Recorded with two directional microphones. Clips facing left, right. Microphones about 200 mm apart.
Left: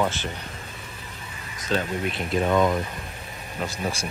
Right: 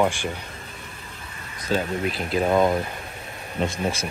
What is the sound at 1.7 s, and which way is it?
Speech, centre (ahead or behind).